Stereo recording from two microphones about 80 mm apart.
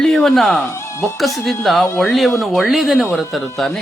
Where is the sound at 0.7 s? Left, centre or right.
Left.